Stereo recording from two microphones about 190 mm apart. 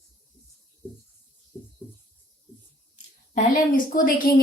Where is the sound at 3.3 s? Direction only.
45° left (ahead or behind).